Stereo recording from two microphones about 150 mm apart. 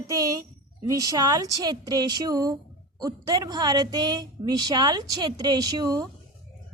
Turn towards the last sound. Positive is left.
turn(degrees=-25)  # may be behind; listen again after turning